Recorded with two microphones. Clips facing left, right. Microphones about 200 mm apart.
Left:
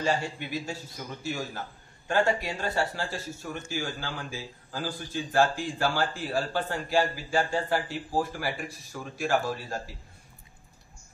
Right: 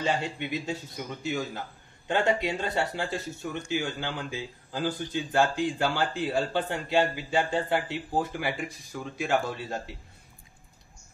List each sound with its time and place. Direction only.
0.0 s speech: 20° right (ahead or behind)